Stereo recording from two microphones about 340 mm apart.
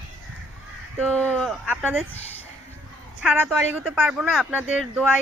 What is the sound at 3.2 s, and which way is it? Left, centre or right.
Speech, centre.